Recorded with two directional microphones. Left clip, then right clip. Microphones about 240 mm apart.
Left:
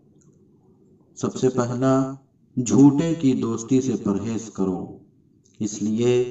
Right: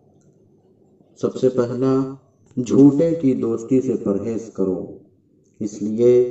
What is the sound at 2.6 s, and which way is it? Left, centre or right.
Speech, left.